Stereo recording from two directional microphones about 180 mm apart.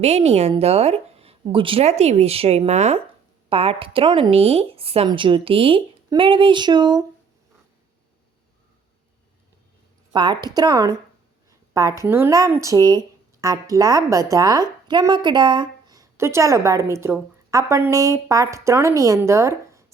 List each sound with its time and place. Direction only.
0.0 s a woman's voice: 35° right (ahead or behind)
10.1 s a woman's voice: 25° right (ahead or behind)